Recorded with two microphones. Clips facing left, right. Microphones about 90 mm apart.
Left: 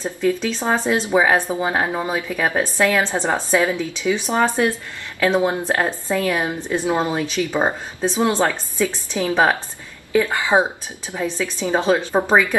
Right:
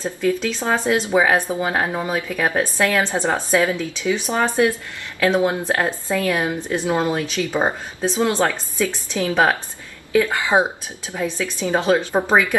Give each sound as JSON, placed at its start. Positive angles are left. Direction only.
{"t": 0.0, "sound": "a woman's voice", "side_deg": 15}
{"t": 11.1, "sound": "speech", "side_deg": 5}
{"t": 11.6, "sound": "a woman's voice", "side_deg": 20}